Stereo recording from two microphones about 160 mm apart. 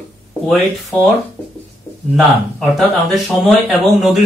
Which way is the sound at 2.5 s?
Centre (ahead or behind).